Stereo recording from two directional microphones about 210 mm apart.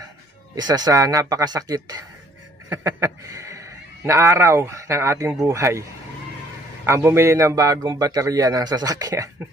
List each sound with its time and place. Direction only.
0.6 s a man's voice: 20° right (ahead or behind)
6.9 s a man's voice: 10° right (ahead or behind)